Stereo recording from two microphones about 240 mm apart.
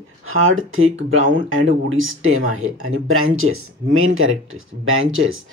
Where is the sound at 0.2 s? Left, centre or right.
Right.